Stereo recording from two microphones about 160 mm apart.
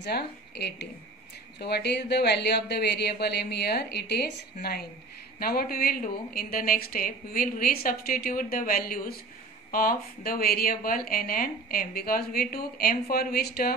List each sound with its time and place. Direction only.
0.0 s speech: 90° left
5.4 s a woman's voice: 70° left (ahead or behind)